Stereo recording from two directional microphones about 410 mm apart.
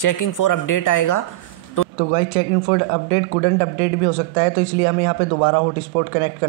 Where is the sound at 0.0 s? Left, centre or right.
Left.